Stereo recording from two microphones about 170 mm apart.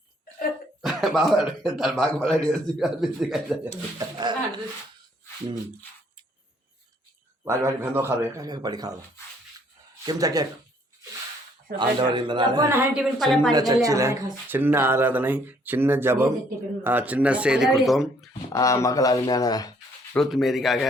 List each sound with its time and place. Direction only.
0.8 s speech: centre (ahead or behind)
3.9 s speech: 25° right (ahead or behind)
7.4 s a man's voice: 15° right (ahead or behind)
10.1 s a man's voice: 20° right (ahead or behind)
11.8 s a man's voice: 25° right (ahead or behind)
12.7 s speech: 10° right (ahead or behind)
13.5 s a man's voice: 20° right (ahead or behind); by 18.3 s centre (ahead or behind)
18.5 s speech: 20° left (ahead or behind)
20.1 s speech: centre (ahead or behind)